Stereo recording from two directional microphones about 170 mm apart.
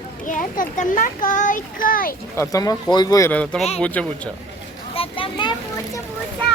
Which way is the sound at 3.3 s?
10° left (ahead or behind).